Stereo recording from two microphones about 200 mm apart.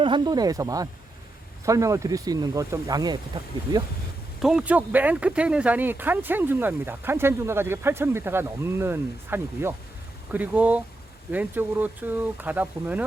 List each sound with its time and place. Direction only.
0.0 s speech: 20° right (ahead or behind)
4.4 s speech: 5° right (ahead or behind)